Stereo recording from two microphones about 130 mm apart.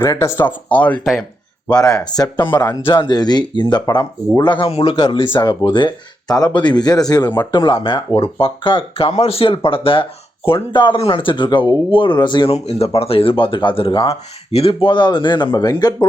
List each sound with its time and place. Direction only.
0.0 s speech: 20° left (ahead or behind)
1.6 s speech: 25° left (ahead or behind)
4.7 s speech: 50° left (ahead or behind)
12.5 s speech: 50° left (ahead or behind); by 16.0 s 30° left (ahead or behind)